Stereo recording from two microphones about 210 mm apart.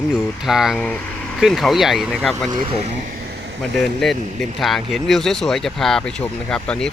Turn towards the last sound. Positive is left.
turn(degrees=5)  # may be behind; listen again after turning